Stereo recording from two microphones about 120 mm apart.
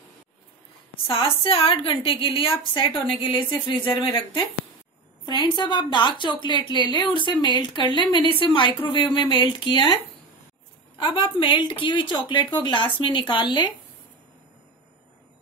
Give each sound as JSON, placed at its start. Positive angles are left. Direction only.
{"t": 1.0, "sound": "a woman's voice", "side_deg": 50}
{"t": 11.0, "sound": "a woman's voice", "side_deg": 45}